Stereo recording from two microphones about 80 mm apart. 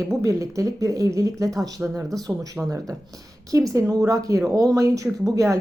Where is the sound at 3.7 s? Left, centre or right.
Right.